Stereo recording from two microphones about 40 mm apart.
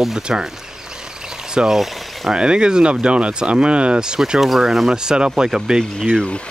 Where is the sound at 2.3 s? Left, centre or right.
Right.